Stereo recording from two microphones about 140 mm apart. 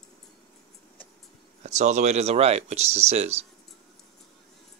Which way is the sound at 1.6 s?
55° right (ahead or behind).